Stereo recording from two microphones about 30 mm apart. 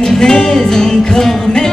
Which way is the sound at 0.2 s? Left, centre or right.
Left.